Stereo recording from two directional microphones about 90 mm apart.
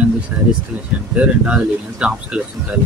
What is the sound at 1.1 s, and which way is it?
Speech, 10° right (ahead or behind).